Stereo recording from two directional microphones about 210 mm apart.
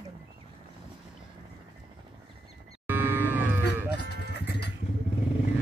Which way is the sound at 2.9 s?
10° right (ahead or behind).